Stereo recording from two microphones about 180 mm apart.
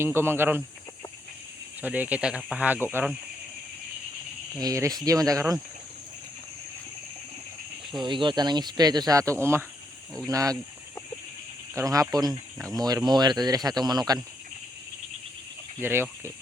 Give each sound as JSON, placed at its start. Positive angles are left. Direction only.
{"t": 0.0, "sound": "speech", "side_deg": -15}
{"t": 1.8, "sound": "speech", "side_deg": -10}
{"t": 4.6, "sound": "speech", "side_deg": -20}
{"t": 8.0, "sound": "speech", "side_deg": -25}
{"t": 11.7, "sound": "speech", "side_deg": -20}
{"t": 15.8, "sound": "speech", "side_deg": -15}